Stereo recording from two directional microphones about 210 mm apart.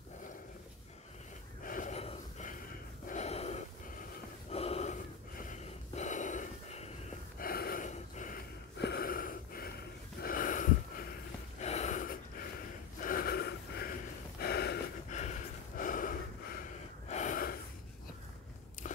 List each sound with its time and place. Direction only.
1.6 s gasp: 40° left (ahead or behind)
7.3 s gasp: 45° left (ahead or behind)
8.7 s gasp: 50° left (ahead or behind)
10.2 s a sound: 40° left (ahead or behind)
11.6 s gasp: 35° left (ahead or behind)
13.0 s a sound: 45° left (ahead or behind)
14.4 s gasp: 50° left (ahead or behind)
15.0 s gasp: 35° left (ahead or behind)
18.8 s biting: 35° left (ahead or behind)